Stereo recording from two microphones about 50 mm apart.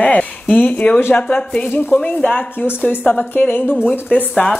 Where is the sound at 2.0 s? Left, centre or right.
Left.